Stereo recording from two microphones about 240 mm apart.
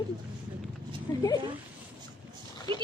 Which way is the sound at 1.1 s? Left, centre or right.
Centre.